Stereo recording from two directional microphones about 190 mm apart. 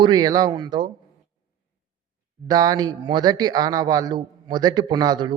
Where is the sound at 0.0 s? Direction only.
20° right (ahead or behind).